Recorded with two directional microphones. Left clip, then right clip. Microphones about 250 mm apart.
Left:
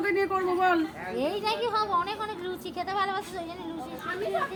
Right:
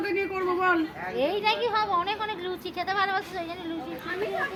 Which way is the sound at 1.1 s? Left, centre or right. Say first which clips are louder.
Right 4 dB; left.